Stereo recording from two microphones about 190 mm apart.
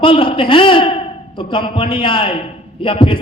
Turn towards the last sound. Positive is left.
turn(degrees=25)  # may be behind; listen again after turning